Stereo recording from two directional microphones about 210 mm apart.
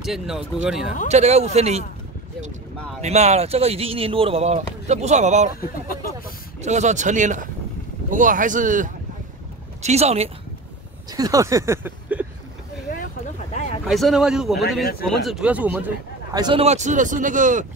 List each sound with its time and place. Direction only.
0.0 s speech: centre (ahead or behind)
1.0 s speech: 30° right (ahead or behind)
3.0 s speech: 30° right (ahead or behind)
6.6 s speech: 35° right (ahead or behind)
11.1 s speech: 20° right (ahead or behind)
13.5 s a sound: 35° left (ahead or behind)
13.8 s speech: centre (ahead or behind)
16.3 s speech: 25° right (ahead or behind)